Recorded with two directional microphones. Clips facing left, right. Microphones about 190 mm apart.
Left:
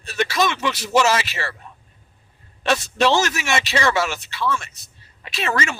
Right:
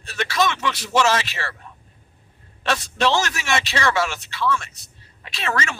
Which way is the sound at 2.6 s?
10° left (ahead or behind).